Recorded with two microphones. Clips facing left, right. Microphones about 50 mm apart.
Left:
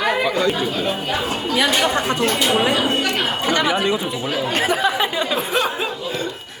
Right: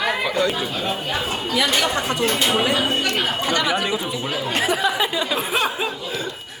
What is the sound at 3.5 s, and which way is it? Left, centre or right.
Speech, centre.